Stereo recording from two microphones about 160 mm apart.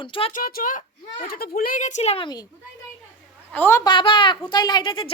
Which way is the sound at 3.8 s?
30° left (ahead or behind).